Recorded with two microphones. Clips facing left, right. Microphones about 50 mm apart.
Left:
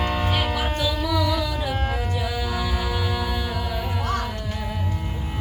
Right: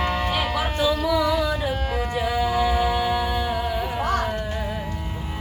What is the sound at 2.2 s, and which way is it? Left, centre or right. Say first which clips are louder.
Music: right 5 dB; right.